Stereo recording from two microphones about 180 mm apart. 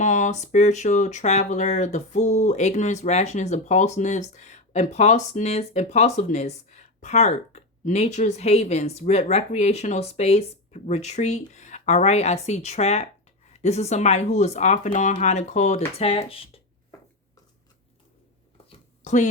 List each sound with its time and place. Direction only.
0.0 s speech: 45° left (ahead or behind)
19.0 s speech: 45° left (ahead or behind)